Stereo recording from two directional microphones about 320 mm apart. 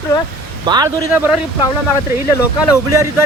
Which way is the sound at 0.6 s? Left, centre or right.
Centre.